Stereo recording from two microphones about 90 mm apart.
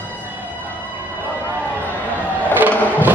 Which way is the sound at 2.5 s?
20° right (ahead or behind).